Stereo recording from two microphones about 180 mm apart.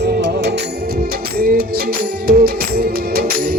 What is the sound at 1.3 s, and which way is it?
Music, 55° right (ahead or behind).